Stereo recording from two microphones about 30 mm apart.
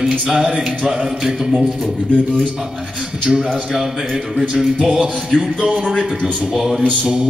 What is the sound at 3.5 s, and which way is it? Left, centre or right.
Speech, centre.